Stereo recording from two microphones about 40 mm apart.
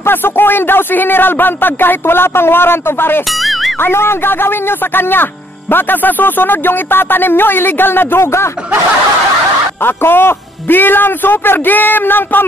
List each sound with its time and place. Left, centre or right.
0.0 s speech: left
3.8 s speech: left
9.8 s speech: left